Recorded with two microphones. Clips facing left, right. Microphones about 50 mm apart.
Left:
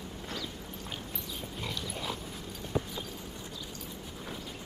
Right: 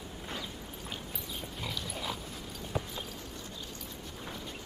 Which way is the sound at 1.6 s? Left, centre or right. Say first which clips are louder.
Left 1 dB; centre.